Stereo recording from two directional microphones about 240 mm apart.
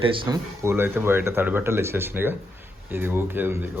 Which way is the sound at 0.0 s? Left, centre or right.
Centre.